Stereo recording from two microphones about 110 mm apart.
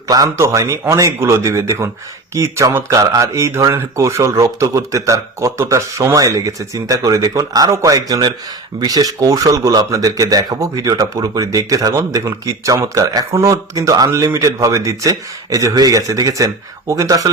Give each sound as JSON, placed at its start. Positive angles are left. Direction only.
{"t": 0.1, "sound": "speech", "side_deg": -30}